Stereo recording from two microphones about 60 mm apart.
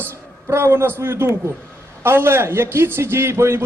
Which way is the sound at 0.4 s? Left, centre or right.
Right.